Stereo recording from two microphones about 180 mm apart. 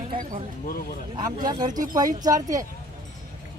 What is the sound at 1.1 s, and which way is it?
Speech, 20° right (ahead or behind).